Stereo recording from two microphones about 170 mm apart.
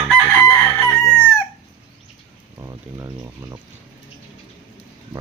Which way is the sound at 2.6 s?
15° right (ahead or behind).